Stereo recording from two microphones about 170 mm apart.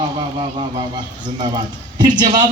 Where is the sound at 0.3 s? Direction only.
30° right (ahead or behind).